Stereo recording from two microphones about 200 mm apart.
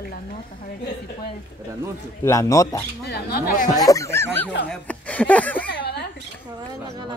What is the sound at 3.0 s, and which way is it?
Speech, 50° left (ahead or behind).